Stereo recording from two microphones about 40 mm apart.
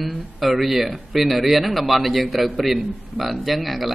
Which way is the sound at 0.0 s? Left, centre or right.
Centre.